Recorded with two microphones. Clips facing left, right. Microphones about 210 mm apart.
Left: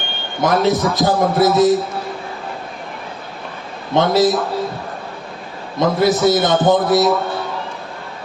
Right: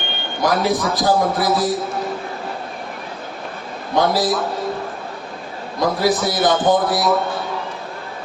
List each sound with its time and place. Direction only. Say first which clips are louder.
0.4 s a man's voice: left 3 dB; 20° left (ahead or behind)
3.9 s a man's voice: left 4 dB; 25° left (ahead or behind)
5.8 s a man's voice: left 4 dB; 25° left (ahead or behind)